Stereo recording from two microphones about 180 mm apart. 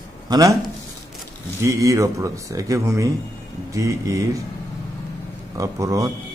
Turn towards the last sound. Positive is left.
turn(degrees=-15)  # may be behind; listen again after turning